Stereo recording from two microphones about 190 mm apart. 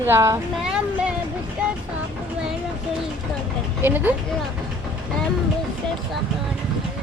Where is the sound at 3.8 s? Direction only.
10° right (ahead or behind).